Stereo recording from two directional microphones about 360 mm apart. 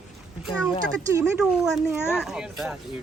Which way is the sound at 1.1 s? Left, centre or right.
Centre.